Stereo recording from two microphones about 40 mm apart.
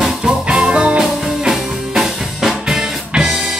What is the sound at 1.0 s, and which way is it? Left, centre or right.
Music, centre.